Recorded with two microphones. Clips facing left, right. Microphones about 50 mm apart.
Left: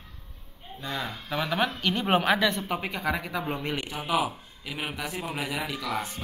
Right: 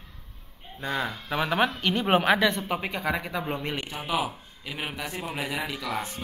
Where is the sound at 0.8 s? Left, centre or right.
Right.